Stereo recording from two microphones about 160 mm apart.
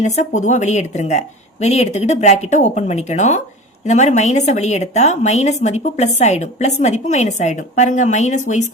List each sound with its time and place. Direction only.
0.0 s a woman's voice: 45° left (ahead or behind)